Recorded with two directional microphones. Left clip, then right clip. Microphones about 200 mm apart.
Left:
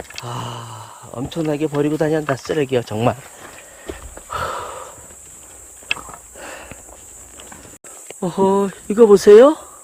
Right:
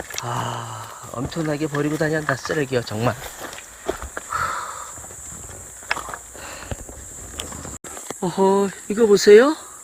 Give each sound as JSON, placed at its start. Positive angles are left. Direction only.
{"t": 0.3, "sound": "speech", "side_deg": 10}
{"t": 4.3, "sound": "horse", "side_deg": 35}
{"t": 8.2, "sound": "speech", "side_deg": 15}